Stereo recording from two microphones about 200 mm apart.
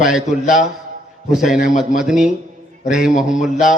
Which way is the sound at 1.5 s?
40° left (ahead or behind).